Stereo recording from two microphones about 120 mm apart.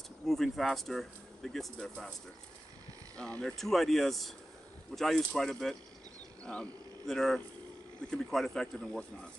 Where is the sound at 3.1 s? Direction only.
10° left (ahead or behind).